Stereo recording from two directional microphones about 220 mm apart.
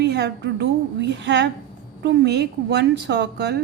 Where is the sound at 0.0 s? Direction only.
50° right (ahead or behind).